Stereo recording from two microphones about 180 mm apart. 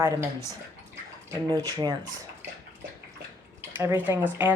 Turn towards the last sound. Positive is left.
turn(degrees=-10)  # may be behind; listen again after turning